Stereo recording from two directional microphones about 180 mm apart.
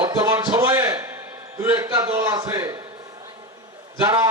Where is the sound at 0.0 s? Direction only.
20° right (ahead or behind).